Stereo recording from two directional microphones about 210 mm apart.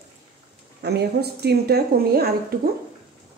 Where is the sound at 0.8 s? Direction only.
50° right (ahead or behind).